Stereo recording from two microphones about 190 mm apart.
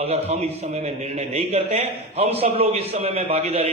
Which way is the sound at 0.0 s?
35° right (ahead or behind).